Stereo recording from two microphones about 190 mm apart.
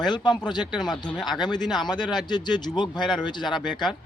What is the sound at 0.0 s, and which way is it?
A man's voice, 25° left (ahead or behind).